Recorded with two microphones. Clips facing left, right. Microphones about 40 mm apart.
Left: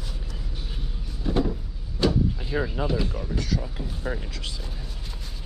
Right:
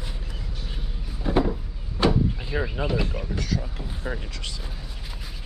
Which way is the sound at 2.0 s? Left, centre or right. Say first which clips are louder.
Right 1 dB; centre.